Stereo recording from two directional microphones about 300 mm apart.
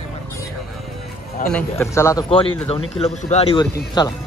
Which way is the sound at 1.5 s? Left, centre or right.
Centre.